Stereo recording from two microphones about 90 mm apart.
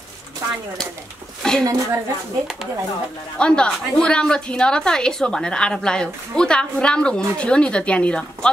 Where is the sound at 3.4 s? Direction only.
10° left (ahead or behind).